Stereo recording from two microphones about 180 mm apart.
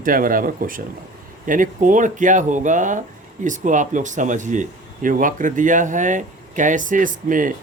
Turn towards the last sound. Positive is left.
turn(degrees=-50)  # may be behind; listen again after turning